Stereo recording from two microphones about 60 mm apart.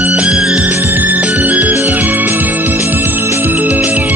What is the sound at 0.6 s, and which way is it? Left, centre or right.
Music, right.